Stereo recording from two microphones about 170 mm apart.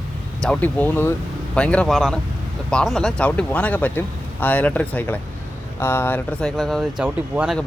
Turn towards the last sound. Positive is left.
turn(degrees=-5)  # may be behind; listen again after turning